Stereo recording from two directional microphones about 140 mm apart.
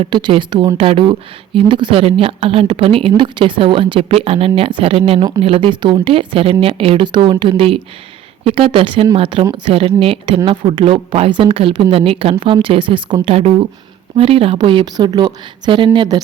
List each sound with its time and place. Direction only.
0.0 s a woman's voice: 35° right (ahead or behind)